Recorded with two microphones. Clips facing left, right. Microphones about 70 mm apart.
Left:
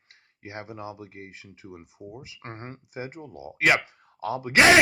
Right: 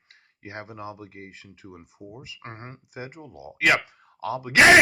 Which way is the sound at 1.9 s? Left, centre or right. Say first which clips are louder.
Left 1 dB; right.